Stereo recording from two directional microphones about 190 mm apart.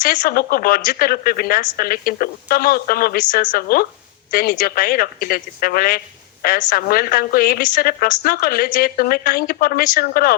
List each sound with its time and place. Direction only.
0.0 s a woman's voice: 45° left (ahead or behind)